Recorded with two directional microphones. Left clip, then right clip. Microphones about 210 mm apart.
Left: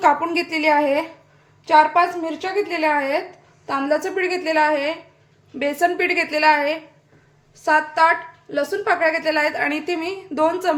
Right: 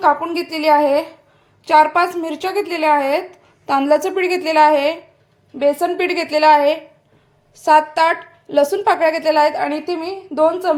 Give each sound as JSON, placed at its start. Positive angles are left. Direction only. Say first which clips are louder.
{"t": 0.0, "sound": "a woman's voice", "louder": "right 1 dB", "side_deg": -5}
{"t": 1.6, "sound": "a woman's voice", "louder": "right 2 dB", "side_deg": -25}
{"t": 5.5, "sound": "a woman's voice", "louder": "right 3 dB", "side_deg": -10}